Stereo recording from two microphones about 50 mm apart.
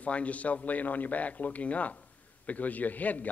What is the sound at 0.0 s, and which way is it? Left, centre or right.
A man's voice, left.